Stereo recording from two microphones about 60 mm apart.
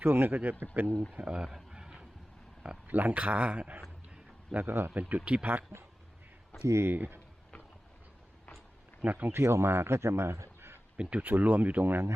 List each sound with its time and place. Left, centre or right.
0.0 s speech: right
0.9 s speech: centre
1.1 s speech: centre
1.7 s vehicle: centre
2.8 s a man's voice: right
4.5 s speech: right
4.9 s a man's voice: right
5.7 s speech: right
6.9 s speech: right
9.0 s speech: right
9.3 s speech: right
10.9 s speech: centre
11.2 s a man's voice: right